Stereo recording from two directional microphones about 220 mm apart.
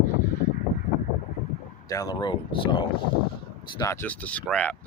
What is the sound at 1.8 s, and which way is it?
Speech, 15° left (ahead or behind).